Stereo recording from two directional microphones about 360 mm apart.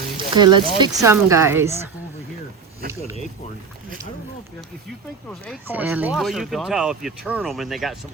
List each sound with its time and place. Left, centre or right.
0.3 s speech: centre
2.8 s speech: right
5.3 s speech: centre